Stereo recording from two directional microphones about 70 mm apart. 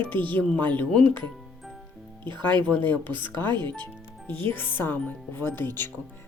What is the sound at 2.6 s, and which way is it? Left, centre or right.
Speech, left.